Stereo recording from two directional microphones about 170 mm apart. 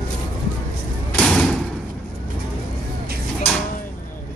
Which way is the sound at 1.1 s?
5° left (ahead or behind).